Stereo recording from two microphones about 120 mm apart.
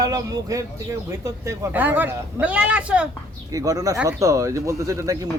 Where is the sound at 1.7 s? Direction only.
15° right (ahead or behind).